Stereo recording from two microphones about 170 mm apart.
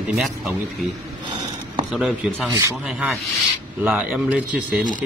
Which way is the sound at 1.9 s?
Centre (ahead or behind).